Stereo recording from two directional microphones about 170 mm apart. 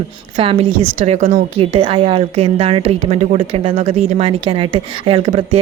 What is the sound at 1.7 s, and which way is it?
Speech, 30° right (ahead or behind).